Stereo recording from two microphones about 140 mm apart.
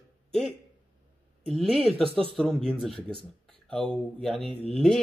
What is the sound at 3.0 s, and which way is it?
Speech, 35° right (ahead or behind).